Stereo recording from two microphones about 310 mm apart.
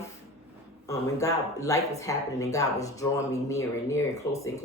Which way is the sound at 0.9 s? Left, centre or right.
Centre.